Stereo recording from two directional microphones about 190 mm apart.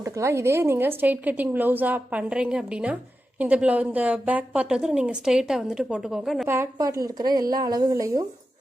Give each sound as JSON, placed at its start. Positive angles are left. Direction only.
{"t": 0.0, "sound": "a woman's voice", "side_deg": -15}
{"t": 6.5, "sound": "a woman's voice", "side_deg": -15}
{"t": 7.5, "sound": "a sound", "side_deg": -20}